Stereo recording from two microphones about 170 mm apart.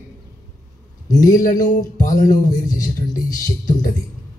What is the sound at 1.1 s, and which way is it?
A man's voice, 50° left (ahead or behind).